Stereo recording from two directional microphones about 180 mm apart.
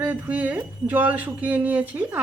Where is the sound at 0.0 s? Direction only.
10° right (ahead or behind).